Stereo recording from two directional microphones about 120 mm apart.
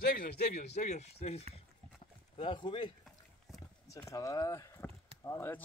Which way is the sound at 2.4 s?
40° left (ahead or behind).